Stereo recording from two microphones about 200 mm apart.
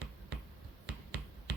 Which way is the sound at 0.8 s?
60° right (ahead or behind).